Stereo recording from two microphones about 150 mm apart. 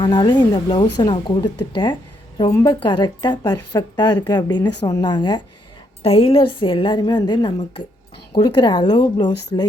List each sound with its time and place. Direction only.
0.0 s speech: 30° left (ahead or behind)
6.0 s speech: 40° left (ahead or behind)